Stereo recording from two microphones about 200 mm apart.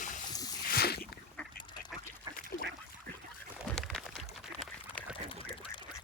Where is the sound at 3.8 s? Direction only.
Centre (ahead or behind).